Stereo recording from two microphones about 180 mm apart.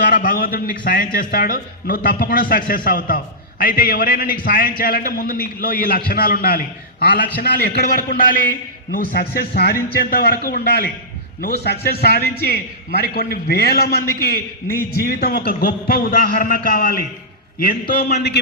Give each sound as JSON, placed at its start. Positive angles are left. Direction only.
{"t": 0.1, "sound": "a man's voice", "side_deg": 55}